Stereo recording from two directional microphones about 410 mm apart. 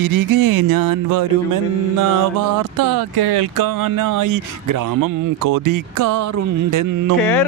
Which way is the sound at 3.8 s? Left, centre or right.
Right.